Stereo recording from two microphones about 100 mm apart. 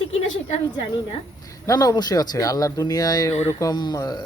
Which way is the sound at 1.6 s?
40° left (ahead or behind).